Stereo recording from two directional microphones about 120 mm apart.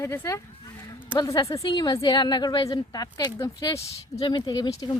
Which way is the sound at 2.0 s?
35° left (ahead or behind).